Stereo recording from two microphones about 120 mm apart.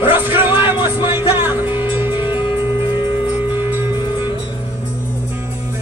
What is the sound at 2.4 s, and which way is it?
Music, 20° right (ahead or behind).